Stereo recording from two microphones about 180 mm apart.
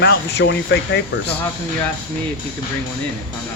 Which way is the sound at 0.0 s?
70° left (ahead or behind).